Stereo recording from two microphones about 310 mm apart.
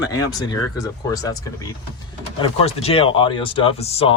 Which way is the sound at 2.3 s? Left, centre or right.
Centre.